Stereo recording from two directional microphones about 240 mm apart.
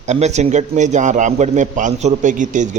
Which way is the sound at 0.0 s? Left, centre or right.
Right.